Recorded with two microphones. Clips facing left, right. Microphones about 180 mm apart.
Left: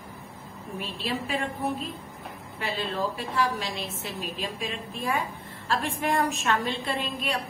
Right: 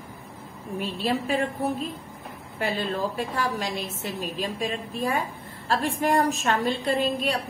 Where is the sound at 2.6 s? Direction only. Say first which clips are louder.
Right 3 dB; 45° right (ahead or behind).